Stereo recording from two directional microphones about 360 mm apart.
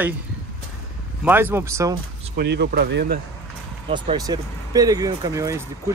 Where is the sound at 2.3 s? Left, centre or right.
Right.